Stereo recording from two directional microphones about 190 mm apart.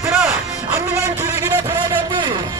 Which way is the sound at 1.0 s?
15° right (ahead or behind).